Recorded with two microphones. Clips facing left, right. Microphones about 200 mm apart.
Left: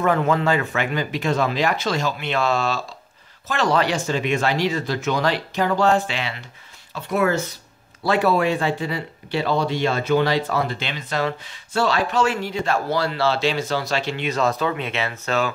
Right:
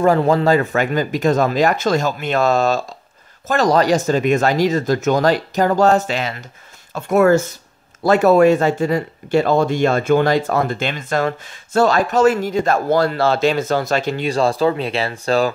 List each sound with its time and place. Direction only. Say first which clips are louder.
0.0 s speech: right 5 dB; 35° right (ahead or behind)